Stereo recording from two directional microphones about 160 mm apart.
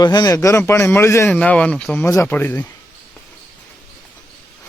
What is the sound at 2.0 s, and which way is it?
Speech, 15° left (ahead or behind).